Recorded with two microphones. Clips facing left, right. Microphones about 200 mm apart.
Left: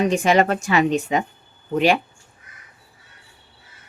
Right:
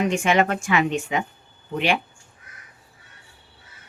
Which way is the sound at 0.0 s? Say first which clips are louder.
Left 3 dB; 35° left (ahead or behind).